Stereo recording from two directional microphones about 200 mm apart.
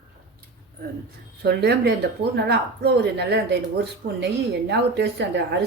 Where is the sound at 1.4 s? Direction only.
55° right (ahead or behind).